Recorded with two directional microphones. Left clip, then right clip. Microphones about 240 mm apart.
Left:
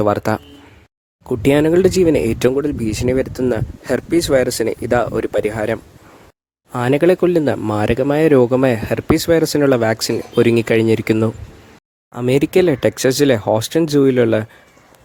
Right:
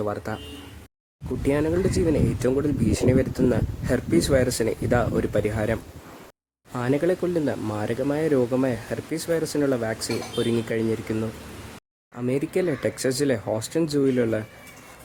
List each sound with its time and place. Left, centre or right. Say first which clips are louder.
0.0 s speech: left 12 dB; left